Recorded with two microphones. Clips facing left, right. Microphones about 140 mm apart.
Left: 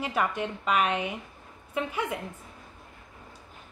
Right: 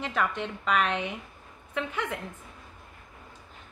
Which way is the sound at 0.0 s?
10° left (ahead or behind).